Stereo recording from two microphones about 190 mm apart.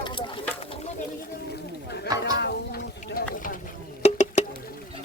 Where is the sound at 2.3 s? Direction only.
60° left (ahead or behind).